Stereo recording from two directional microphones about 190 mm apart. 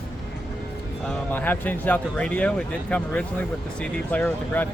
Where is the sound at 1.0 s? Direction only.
10° left (ahead or behind).